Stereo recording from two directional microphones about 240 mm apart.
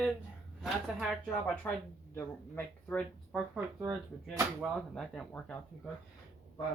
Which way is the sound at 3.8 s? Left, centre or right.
Centre.